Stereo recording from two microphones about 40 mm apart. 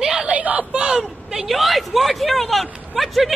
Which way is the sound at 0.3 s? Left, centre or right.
Right.